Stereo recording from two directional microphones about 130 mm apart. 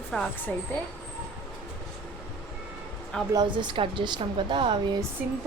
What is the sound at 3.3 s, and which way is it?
A woman's voice, 35° right (ahead or behind).